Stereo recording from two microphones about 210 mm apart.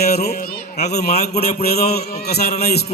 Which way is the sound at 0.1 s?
50° left (ahead or behind).